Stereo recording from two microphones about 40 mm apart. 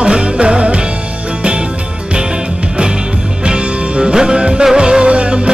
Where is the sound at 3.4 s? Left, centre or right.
Right.